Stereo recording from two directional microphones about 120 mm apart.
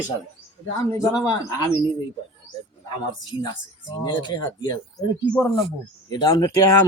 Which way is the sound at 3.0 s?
35° left (ahead or behind).